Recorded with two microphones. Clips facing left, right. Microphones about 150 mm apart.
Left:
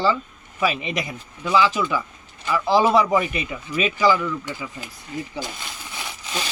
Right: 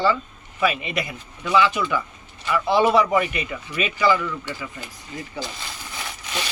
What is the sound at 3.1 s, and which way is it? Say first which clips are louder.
Speech: even; 25° left (ahead or behind).